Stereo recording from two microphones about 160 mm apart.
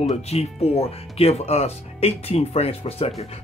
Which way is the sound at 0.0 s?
40° left (ahead or behind).